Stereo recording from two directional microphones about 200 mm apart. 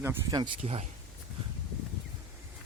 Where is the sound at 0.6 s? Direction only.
35° right (ahead or behind).